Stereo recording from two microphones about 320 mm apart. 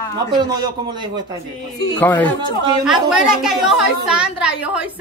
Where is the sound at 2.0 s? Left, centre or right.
Centre.